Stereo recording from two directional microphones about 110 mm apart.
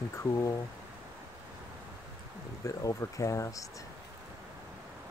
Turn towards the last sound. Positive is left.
turn(degrees=30)  # may be behind; listen again after turning